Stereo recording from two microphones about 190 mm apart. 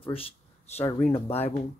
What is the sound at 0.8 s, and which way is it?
Speech, 10° left (ahead or behind).